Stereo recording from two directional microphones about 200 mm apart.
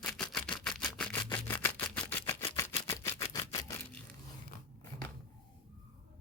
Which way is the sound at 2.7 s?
25° left (ahead or behind).